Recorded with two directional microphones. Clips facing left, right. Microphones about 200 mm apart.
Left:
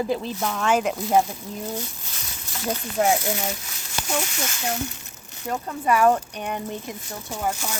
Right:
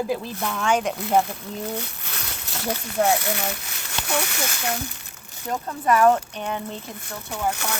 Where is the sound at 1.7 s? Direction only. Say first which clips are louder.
Right 1 dB; 65° right (ahead or behind).